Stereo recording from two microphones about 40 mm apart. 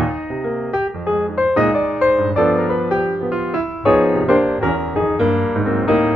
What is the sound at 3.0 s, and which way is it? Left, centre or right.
Music, right.